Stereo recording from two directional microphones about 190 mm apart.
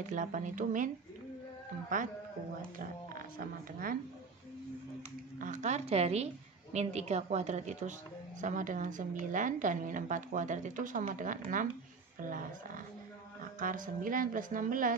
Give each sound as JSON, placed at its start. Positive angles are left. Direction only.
{"t": 0.0, "sound": "a woman's voice", "side_deg": -40}
{"t": 3.3, "sound": "a woman's voice", "side_deg": -50}
{"t": 5.4, "sound": "a woman's voice", "side_deg": -40}